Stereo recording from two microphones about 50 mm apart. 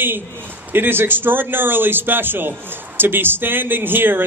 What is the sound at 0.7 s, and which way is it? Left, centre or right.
A man's voice, right.